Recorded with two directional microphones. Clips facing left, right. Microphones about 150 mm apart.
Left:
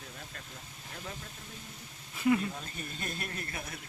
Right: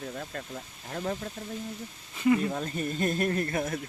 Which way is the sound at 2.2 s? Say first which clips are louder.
Right 3 dB; centre (ahead or behind).